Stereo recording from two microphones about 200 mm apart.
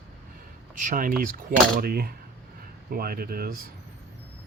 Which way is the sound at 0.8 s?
40° right (ahead or behind).